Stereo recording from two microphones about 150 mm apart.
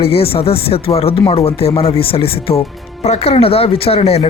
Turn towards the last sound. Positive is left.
turn(degrees=45)  # may be behind; listen again after turning